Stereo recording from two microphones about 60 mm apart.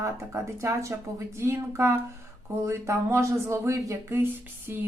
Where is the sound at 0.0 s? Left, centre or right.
Right.